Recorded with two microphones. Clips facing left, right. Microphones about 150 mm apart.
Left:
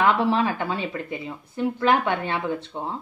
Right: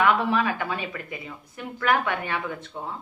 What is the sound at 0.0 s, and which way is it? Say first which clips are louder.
A woman's voice: left 2 dB; 30° left (ahead or behind).